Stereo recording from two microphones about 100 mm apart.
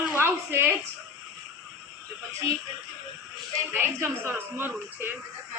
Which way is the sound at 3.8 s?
25° right (ahead or behind).